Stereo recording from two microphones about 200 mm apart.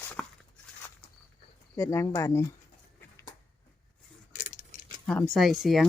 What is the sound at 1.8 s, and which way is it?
Speech, 15° left (ahead or behind).